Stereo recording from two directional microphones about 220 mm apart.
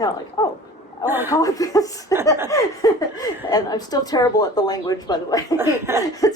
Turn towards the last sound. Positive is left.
turn(degrees=15)  # may be behind; listen again after turning